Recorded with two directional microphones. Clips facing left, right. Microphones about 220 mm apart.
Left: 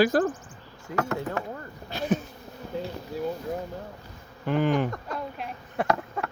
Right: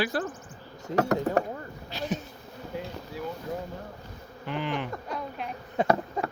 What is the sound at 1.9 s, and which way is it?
Insect, 50° left (ahead or behind).